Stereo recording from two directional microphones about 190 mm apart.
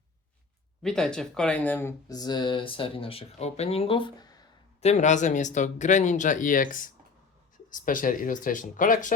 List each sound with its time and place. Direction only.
0.8 s speech: 5° left (ahead or behind); by 4.4 s 20° left (ahead or behind)
4.8 s speech: 35° left (ahead or behind)